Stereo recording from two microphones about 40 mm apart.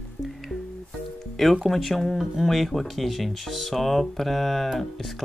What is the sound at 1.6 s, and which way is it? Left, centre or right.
Speech, centre.